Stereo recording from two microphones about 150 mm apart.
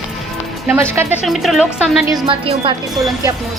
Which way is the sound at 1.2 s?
Centre (ahead or behind).